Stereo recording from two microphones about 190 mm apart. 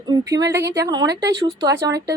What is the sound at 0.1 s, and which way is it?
Speech, 20° right (ahead or behind).